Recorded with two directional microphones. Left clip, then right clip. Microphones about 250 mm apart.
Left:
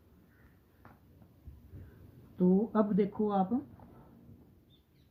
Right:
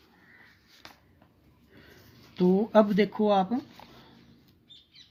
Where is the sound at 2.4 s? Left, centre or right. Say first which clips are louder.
Right 8 dB; right.